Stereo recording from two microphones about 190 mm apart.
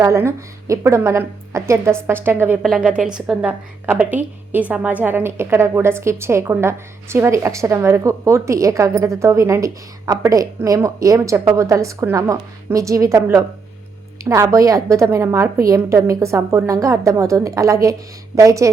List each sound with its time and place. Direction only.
0.0 s a woman's voice: 15° right (ahead or behind)